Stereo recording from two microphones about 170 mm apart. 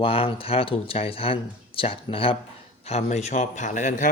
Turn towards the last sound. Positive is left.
turn(degrees=50)  # may be behind; listen again after turning